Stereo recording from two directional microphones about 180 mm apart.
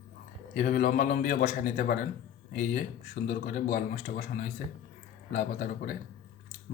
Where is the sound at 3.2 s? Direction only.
45° left (ahead or behind).